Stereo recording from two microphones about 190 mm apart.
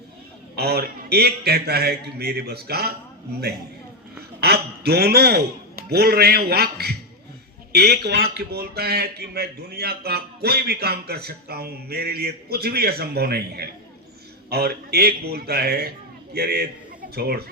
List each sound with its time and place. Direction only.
0.5 s a man's voice: 55° right (ahead or behind)
4.4 s a man's voice: 55° right (ahead or behind)